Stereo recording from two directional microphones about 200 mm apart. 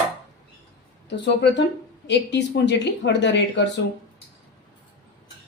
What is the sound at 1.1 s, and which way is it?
A woman's voice, 60° left (ahead or behind).